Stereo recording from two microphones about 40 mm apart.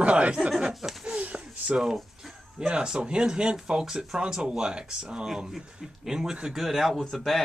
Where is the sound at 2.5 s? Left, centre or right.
Right.